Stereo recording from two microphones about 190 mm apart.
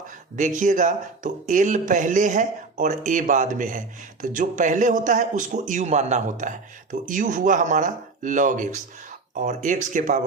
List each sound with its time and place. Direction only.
0.3 s speech: 40° right (ahead or behind)